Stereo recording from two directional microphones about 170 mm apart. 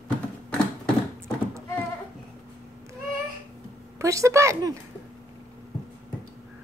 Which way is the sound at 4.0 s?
20° right (ahead or behind).